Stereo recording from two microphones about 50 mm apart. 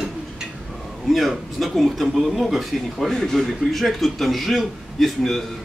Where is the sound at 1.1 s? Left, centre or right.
Centre.